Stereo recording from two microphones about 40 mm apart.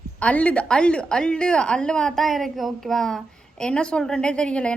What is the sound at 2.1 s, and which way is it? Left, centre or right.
A woman's voice, centre.